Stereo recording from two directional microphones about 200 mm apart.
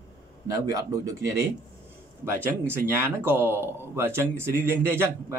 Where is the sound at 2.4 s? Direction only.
10° right (ahead or behind).